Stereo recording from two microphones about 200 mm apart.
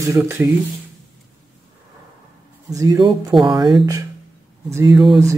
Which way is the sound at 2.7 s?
15° right (ahead or behind).